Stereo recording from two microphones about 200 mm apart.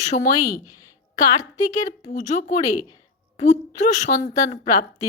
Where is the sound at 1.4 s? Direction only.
15° left (ahead or behind).